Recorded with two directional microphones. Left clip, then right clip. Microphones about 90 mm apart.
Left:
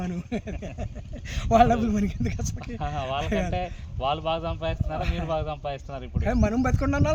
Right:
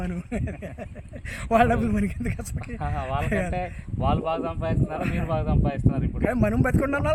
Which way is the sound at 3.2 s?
35° right (ahead or behind).